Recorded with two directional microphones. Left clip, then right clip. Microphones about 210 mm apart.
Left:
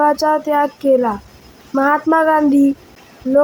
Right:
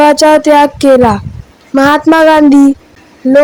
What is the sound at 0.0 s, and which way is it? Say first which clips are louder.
Speech: right 9 dB; 35° right (ahead or behind).